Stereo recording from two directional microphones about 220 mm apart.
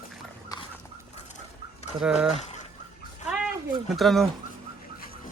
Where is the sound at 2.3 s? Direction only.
30° left (ahead or behind).